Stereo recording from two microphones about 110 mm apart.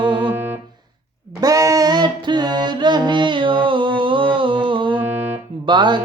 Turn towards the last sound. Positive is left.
turn(degrees=-45)  # may be behind; listen again after turning